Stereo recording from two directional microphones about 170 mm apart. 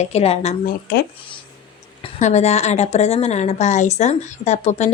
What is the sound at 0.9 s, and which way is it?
Speech, 65° left (ahead or behind).